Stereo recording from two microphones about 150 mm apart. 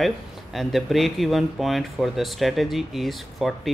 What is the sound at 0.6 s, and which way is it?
Speech, centre (ahead or behind).